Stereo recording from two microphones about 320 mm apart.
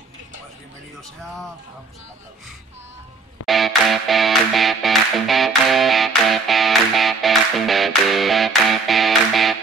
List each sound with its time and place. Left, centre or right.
3.4 s music: centre